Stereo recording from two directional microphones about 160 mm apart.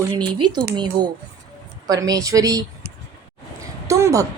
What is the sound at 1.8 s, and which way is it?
A woman's voice, 20° right (ahead or behind).